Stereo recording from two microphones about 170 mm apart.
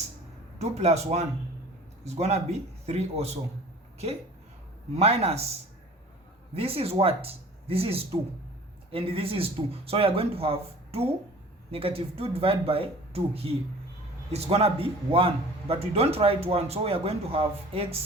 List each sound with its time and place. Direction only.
0.6 s a man's voice: 40° right (ahead or behind)
4.9 s a man's voice: 40° right (ahead or behind)
6.5 s a man's voice: 35° right (ahead or behind)